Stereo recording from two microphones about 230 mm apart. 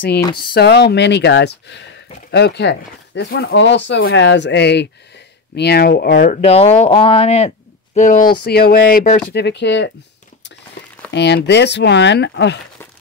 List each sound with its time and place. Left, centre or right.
0.6 s speech: left
6.3 s speech: left
8.5 s speech: left
9.3 s speech: left
11.1 s speech: left